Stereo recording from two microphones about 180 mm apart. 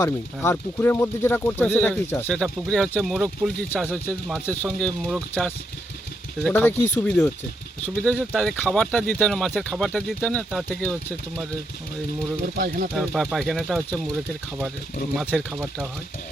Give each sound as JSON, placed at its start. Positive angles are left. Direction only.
{"t": 0.0, "sound": "speech", "side_deg": 15}
{"t": 12.5, "sound": "speech", "side_deg": -55}
{"t": 12.9, "sound": "speech", "side_deg": 0}
{"t": 15.1, "sound": "speech", "side_deg": -5}